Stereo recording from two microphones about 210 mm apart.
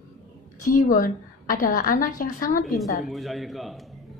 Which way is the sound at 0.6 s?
40° left (ahead or behind).